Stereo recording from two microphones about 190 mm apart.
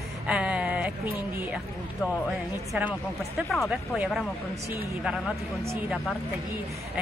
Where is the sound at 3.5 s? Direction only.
5° right (ahead or behind).